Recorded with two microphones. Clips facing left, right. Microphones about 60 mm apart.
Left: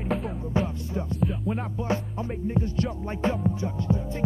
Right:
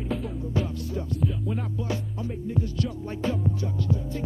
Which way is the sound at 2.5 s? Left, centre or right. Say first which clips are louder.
Left 1 dB; left.